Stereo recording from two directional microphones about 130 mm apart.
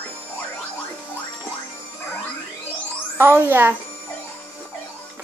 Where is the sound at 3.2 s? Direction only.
15° right (ahead or behind).